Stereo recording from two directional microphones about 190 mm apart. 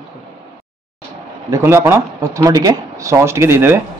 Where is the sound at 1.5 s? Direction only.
15° right (ahead or behind).